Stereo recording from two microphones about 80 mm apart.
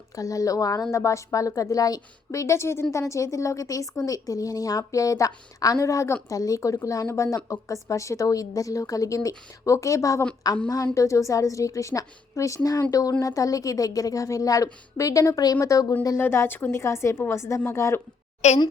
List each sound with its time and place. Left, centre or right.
0.2 s a woman's voice: left
10.4 s a woman's voice: left
10.9 s a woman's voice: left
16.1 s a woman's voice: left